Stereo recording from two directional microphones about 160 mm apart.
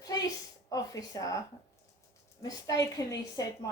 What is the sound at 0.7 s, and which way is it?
Speech, 20° left (ahead or behind).